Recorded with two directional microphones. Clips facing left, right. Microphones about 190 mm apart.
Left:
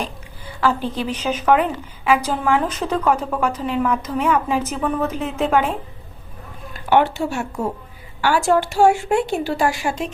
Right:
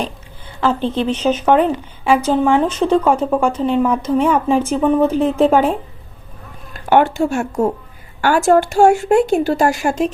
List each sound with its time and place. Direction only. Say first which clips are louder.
0.6 s speech: right 4 dB; 25° right (ahead or behind)
6.9 s speech: right 4 dB; 45° right (ahead or behind)